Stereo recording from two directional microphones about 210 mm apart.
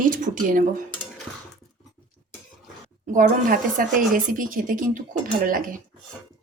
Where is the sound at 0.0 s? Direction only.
40° right (ahead or behind).